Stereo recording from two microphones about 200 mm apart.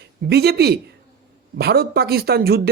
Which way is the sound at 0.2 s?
55° right (ahead or behind).